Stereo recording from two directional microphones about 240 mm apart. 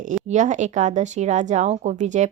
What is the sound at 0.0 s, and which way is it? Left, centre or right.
A woman's voice, right.